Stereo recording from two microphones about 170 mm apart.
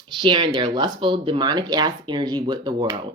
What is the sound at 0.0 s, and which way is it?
Speech, 30° right (ahead or behind).